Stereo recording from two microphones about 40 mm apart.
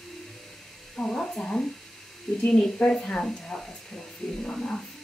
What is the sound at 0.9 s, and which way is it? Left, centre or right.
Speech, left.